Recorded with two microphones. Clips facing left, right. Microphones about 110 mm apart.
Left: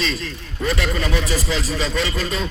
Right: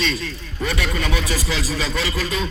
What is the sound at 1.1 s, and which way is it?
A man's voice, 10° right (ahead or behind).